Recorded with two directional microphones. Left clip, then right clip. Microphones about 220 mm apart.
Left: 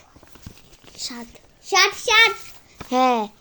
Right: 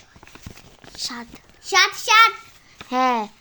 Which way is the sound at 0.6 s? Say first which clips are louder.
Right 3 dB; 15° right (ahead or behind).